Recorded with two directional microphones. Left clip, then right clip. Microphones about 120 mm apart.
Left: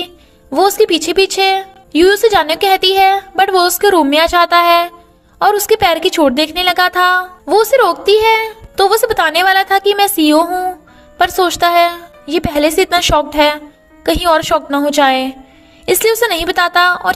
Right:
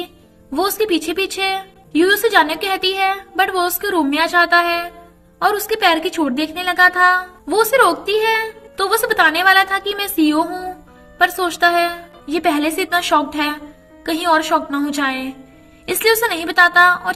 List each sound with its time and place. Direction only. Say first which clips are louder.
0.5 s a woman's voice: left 7 dB; 75° left (ahead or behind)